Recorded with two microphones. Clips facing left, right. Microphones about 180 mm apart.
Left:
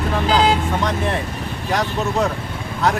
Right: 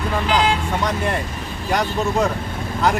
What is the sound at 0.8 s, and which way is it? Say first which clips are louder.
Speech: left 1 dB; centre (ahead or behind).